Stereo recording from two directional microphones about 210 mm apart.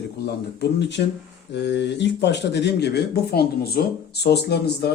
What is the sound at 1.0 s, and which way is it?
Speech, 50° left (ahead or behind).